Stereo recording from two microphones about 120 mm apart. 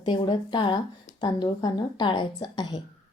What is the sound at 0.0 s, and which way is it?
A woman's voice, 40° left (ahead or behind).